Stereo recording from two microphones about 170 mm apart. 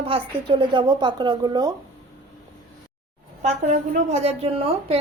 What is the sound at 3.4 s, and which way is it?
A woman's voice, 40° right (ahead or behind).